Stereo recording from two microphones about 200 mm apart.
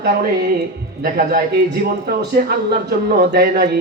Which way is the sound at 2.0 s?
50° right (ahead or behind).